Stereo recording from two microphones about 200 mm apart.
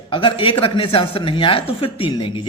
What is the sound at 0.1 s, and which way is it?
Speech, 25° left (ahead or behind).